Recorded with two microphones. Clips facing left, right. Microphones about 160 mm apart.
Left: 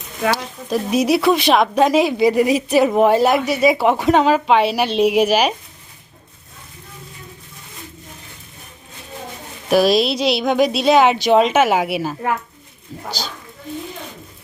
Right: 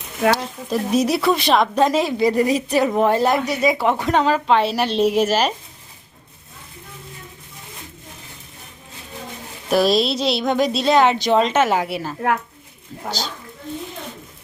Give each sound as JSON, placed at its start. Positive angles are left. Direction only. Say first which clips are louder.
{"t": 0.2, "sound": "speech", "louder": "right 2 dB", "side_deg": 0}
{"t": 9.6, "sound": "speech", "louder": "left 2 dB", "side_deg": 5}
{"t": 13.1, "sound": "speech", "louder": "right 2 dB", "side_deg": -25}